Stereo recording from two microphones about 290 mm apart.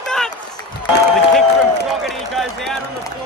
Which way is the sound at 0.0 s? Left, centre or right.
Centre.